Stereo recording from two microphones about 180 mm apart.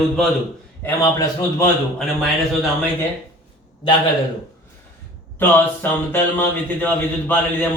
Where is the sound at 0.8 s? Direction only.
15° left (ahead or behind).